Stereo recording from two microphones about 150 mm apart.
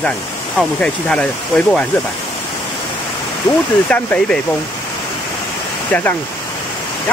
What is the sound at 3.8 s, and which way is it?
Speech, 10° left (ahead or behind).